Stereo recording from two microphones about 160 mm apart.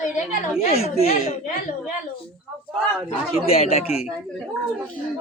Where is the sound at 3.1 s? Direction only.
40° left (ahead or behind).